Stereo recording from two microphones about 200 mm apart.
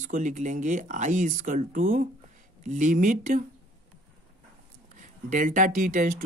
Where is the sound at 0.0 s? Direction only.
40° right (ahead or behind).